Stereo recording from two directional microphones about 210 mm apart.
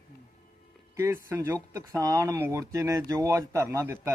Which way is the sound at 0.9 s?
10° right (ahead or behind).